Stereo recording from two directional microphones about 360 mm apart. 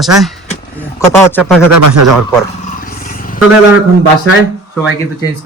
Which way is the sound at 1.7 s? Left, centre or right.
Right.